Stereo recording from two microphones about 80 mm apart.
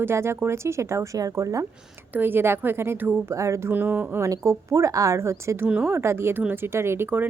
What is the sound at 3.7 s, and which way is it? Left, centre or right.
Speech, right.